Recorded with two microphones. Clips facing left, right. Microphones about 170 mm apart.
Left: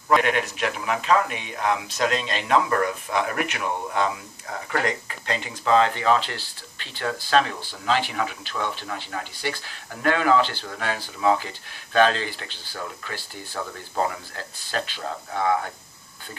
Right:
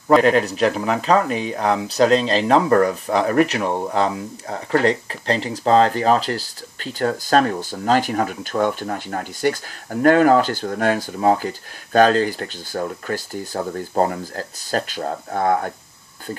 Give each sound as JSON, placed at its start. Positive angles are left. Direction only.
{"t": 0.1, "sound": "speech", "side_deg": -35}